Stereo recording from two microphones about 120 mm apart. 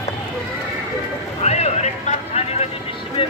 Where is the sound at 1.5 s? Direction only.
65° left (ahead or behind).